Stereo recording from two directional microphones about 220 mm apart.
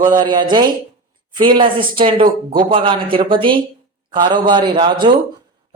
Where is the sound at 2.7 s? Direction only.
25° right (ahead or behind).